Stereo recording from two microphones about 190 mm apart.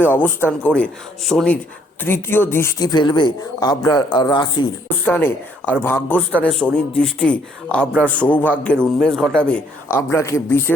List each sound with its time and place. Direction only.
0.0 s a man's voice: 10° left (ahead or behind)
0.8 s speech: centre (ahead or behind)
2.0 s speech: 10° left (ahead or behind)
5.0 s a man's voice: 10° left (ahead or behind)